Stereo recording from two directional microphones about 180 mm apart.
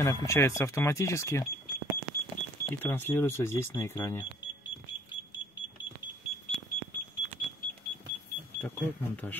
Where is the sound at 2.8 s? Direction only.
10° left (ahead or behind).